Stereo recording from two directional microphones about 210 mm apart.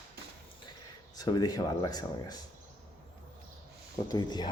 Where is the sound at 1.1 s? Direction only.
20° left (ahead or behind).